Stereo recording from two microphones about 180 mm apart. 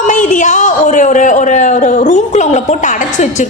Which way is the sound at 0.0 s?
45° left (ahead or behind).